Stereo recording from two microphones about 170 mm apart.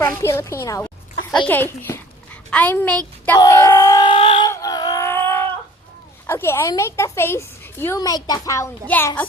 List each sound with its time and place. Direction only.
0.0 s a woman's voice: 15° left (ahead or behind)
3.3 s speech: 20° left (ahead or behind)
4.4 s a sound: 20° left (ahead or behind)
6.2 s a woman's voice: 15° left (ahead or behind)